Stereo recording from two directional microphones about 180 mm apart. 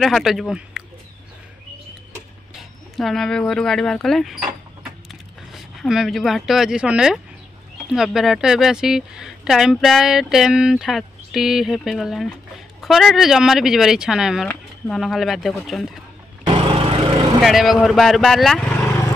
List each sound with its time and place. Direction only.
0.0 s speech: centre (ahead or behind)
3.0 s speech: centre (ahead or behind)
16.4 s lawn mower: 35° right (ahead or behind)
17.4 s speech: centre (ahead or behind)